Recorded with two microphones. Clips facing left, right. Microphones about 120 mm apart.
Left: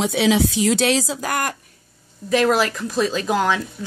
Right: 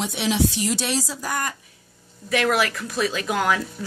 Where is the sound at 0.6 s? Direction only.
90° left.